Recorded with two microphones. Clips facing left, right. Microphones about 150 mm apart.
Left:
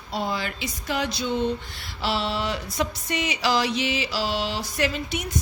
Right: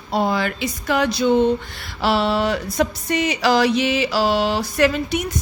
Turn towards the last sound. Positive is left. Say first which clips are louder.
# right 8 dB
turn(degrees=-55)  # may be behind; listen again after turning